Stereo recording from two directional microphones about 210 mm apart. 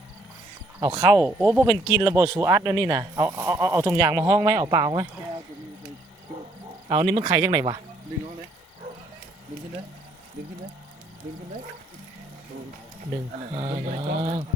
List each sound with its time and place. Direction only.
0.8 s speech: 20° right (ahead or behind)
6.8 s speech: 25° right (ahead or behind)
13.6 s speech: 30° right (ahead or behind)